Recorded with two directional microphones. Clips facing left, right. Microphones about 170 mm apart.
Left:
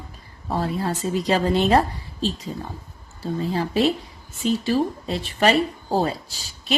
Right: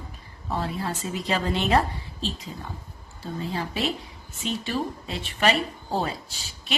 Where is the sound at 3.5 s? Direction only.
35° left (ahead or behind).